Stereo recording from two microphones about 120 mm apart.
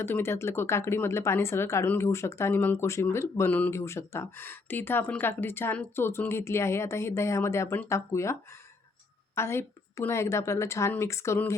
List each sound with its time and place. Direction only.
0.0 s speech: 20° left (ahead or behind)